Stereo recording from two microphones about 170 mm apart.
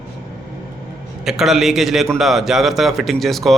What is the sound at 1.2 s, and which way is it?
Speech, centre (ahead or behind).